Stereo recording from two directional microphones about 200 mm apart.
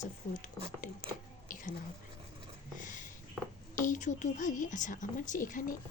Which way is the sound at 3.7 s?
40° left (ahead or behind).